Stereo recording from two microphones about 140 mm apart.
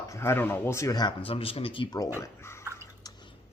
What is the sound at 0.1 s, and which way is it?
Speech, 20° left (ahead or behind).